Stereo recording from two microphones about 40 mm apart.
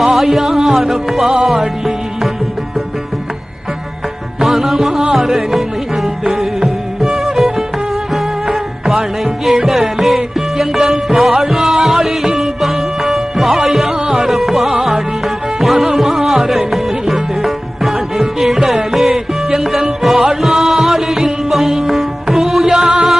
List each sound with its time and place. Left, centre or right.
0.0 s music: centre
4.4 s music: centre